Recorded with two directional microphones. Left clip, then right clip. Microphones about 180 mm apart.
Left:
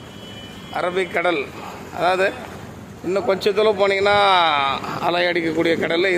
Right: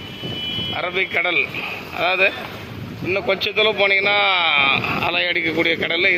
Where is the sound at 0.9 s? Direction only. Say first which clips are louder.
Left 1 dB; 20° left (ahead or behind).